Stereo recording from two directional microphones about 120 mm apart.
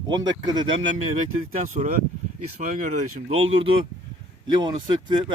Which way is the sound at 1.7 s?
70° right (ahead or behind).